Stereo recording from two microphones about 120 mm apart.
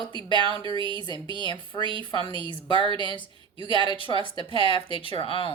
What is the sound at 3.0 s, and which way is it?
Speech, 40° left (ahead or behind).